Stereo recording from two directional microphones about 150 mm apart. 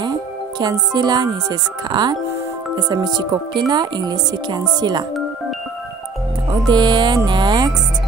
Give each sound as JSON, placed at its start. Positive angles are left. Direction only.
{"t": 0.0, "sound": "speech", "side_deg": -30}
{"t": 6.7, "sound": "music", "side_deg": -30}
{"t": 7.2, "sound": "speech", "side_deg": -30}